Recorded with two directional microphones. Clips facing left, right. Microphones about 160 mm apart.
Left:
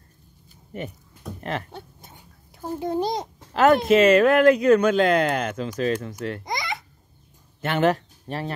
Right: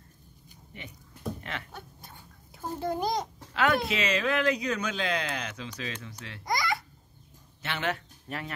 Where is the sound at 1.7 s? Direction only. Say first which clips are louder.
Left 4 dB; 20° left (ahead or behind).